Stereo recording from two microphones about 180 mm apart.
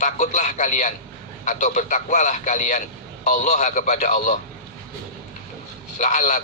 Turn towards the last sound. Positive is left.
turn(degrees=45)  # may be behind; listen again after turning